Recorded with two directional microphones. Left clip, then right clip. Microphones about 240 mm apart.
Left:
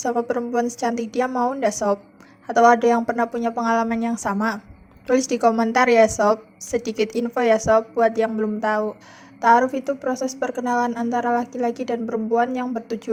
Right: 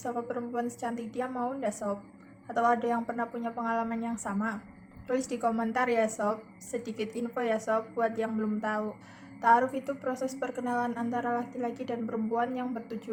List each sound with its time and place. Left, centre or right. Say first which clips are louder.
0.0 s a woman's voice: left 12 dB; left